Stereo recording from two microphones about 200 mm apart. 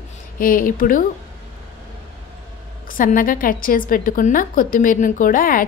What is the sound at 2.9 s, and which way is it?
A woman's voice, 45° left (ahead or behind).